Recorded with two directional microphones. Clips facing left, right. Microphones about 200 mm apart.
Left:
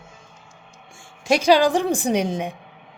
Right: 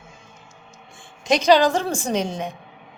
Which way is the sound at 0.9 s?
10° left (ahead or behind).